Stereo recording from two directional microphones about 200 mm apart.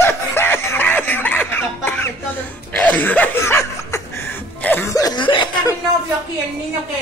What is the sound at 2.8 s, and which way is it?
Chuckle, 10° left (ahead or behind).